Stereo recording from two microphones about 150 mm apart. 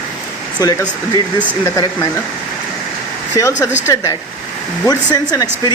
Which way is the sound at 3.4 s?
20° left (ahead or behind).